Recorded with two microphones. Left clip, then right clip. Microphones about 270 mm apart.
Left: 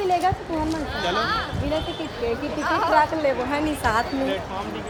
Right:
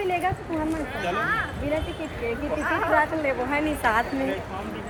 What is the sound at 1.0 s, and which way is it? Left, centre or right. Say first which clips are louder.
Speech: left 3 dB; centre.